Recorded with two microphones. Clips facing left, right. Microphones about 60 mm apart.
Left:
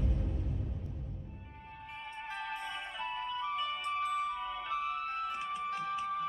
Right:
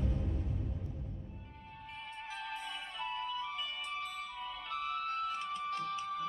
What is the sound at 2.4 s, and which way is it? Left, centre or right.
Music, centre.